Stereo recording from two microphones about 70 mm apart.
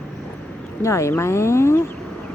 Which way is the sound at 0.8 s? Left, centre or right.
Left.